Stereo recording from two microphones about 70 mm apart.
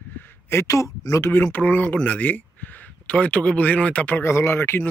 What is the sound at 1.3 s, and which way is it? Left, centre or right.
Speech, left.